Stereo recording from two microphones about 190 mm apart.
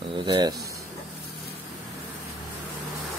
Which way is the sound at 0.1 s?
25° right (ahead or behind).